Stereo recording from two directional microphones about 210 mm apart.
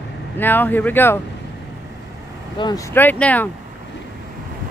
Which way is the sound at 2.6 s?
20° left (ahead or behind).